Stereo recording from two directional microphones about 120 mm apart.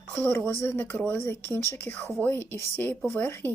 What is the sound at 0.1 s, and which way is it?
Speech, 20° left (ahead or behind).